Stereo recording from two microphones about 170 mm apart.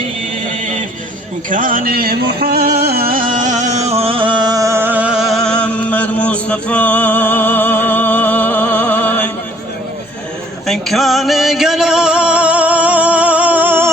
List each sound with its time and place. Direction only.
0.6 s a sound: 45° right (ahead or behind)
1.5 s music: 50° right (ahead or behind); by 9.3 s 10° left (ahead or behind)
10.7 s music: centre (ahead or behind)